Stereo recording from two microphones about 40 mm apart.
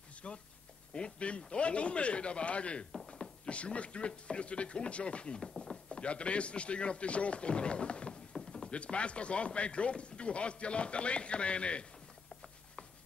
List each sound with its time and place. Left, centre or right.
0.2 s a sound: left
0.9 s speech: left
5.9 s speech: left